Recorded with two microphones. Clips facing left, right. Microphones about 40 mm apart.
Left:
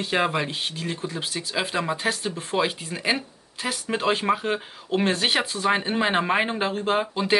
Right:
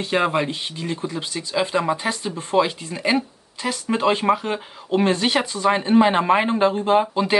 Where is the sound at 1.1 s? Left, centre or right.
Centre.